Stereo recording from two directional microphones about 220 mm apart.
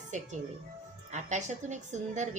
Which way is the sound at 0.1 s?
30° right (ahead or behind).